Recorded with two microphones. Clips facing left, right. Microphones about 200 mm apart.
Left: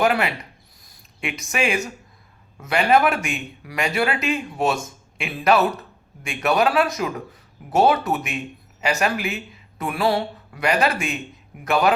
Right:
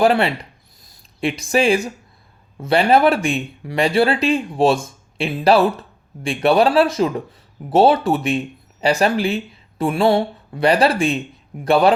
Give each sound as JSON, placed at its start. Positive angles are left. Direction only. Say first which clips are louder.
{"t": 0.0, "sound": "speech", "louder": "right 5 dB", "side_deg": -30}